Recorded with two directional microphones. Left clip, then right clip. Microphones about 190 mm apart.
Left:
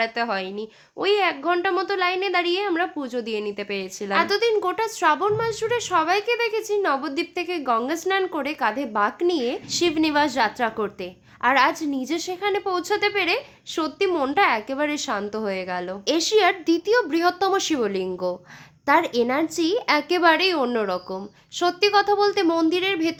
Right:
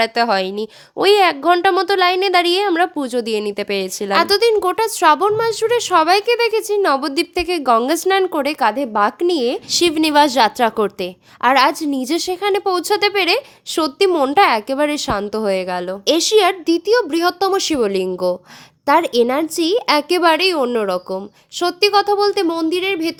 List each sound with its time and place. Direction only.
0.0 s a woman's voice: 50° right (ahead or behind); by 23.1 s 30° right (ahead or behind)